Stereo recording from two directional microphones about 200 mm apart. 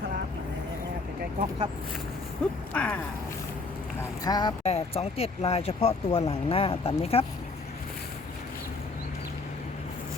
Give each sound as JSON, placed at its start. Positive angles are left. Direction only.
{"t": 1.4, "sound": "speech", "side_deg": -25}
{"t": 2.7, "sound": "speech", "side_deg": 5}
{"t": 4.2, "sound": "speech", "side_deg": 20}